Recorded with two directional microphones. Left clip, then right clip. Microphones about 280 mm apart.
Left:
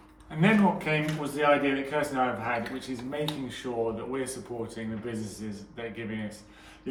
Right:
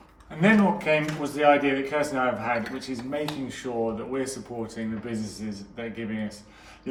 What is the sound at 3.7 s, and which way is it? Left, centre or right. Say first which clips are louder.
A man's voice: right 2 dB; centre.